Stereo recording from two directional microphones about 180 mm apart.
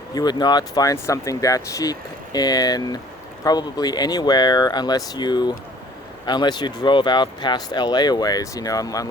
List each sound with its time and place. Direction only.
0.1 s speech: 20° left (ahead or behind)